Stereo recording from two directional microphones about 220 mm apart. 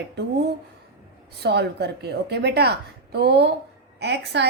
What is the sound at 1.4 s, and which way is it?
A woman's voice, 50° right (ahead or behind).